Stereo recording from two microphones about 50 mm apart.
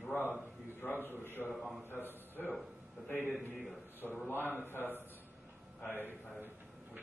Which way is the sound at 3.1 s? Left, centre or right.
Left.